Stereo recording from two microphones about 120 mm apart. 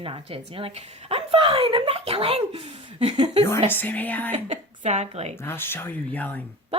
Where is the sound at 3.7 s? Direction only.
15° left (ahead or behind).